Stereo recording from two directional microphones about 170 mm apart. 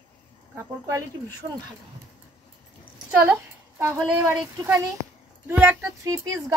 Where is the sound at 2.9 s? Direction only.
5° right (ahead or behind).